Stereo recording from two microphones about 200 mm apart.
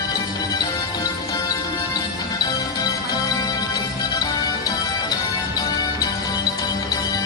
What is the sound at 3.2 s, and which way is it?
Music, 20° left (ahead or behind).